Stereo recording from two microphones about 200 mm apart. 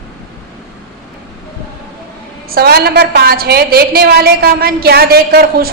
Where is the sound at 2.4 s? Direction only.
50° right (ahead or behind).